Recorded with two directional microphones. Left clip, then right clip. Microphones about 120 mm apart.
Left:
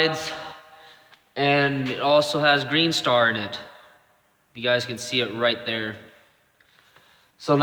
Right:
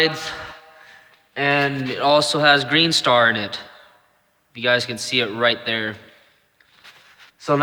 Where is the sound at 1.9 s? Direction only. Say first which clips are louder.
Right 4 dB; 70° right (ahead or behind).